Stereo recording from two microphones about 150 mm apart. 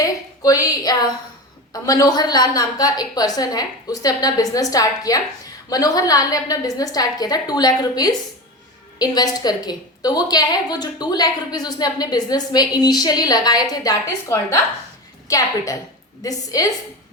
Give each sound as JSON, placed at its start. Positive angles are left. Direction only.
{"t": 0.0, "sound": "a woman's voice", "side_deg": 20}